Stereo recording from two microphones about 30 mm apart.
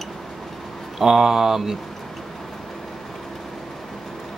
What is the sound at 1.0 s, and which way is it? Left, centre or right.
Speech, centre.